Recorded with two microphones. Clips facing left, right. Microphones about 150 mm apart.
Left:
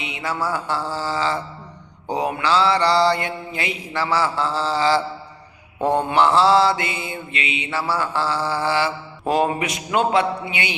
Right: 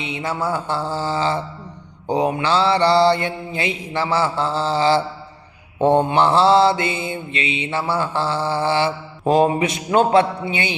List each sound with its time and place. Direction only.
0.0 s mantra: 30° right (ahead or behind)